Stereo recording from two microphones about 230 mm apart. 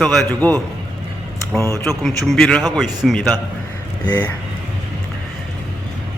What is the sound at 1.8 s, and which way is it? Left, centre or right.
A man's voice, centre.